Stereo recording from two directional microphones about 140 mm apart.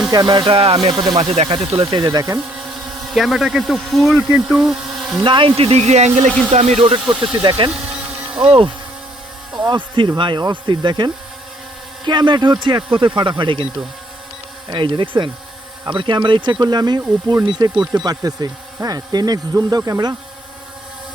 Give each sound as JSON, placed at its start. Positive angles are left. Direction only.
{"t": 0.1, "sound": "speech", "side_deg": -30}
{"t": 3.1, "sound": "speech", "side_deg": 0}
{"t": 5.2, "sound": "speech", "side_deg": -35}
{"t": 6.2, "sound": "speech", "side_deg": 5}
{"t": 6.5, "sound": "speech", "side_deg": -50}